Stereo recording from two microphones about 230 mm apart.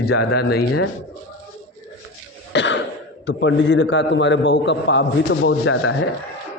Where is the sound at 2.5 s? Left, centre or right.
Left.